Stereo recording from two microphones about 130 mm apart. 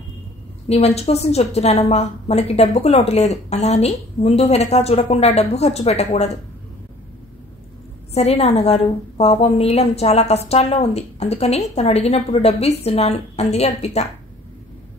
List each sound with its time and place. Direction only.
0.7 s a woman's voice: 55° left (ahead or behind)
8.1 s a woman's voice: 55° left (ahead or behind)